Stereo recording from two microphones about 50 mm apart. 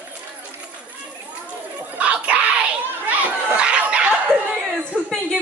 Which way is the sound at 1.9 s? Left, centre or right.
Right.